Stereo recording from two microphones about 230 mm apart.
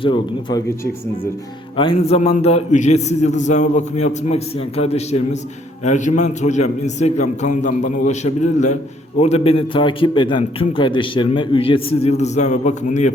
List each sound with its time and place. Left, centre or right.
0.0 s a man's voice: left
1.7 s a man's voice: left